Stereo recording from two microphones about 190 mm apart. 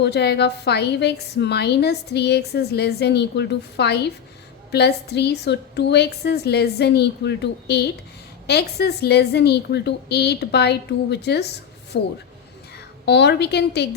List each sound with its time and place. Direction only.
0.0 s a woman's voice: 60° left (ahead or behind)